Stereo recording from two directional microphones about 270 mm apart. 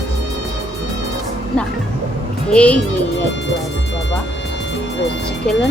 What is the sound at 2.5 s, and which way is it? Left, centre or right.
Speech, centre.